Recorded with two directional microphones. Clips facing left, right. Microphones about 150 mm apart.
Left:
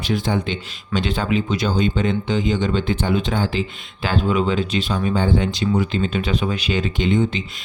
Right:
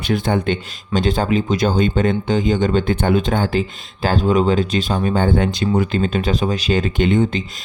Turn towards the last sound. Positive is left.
turn(degrees=-50)  # may be behind; listen again after turning